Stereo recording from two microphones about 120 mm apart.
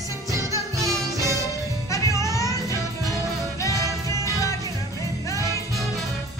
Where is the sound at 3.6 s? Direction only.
25° left (ahead or behind).